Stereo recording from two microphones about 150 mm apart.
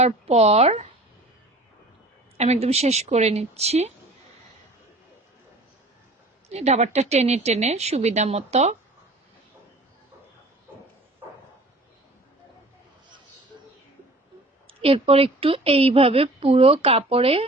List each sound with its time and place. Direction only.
0.0 s a woman's voice: 45° right (ahead or behind)
2.4 s a woman's voice: 45° right (ahead or behind)
6.5 s a woman's voice: 45° right (ahead or behind)
14.7 s a woman's voice: 40° right (ahead or behind)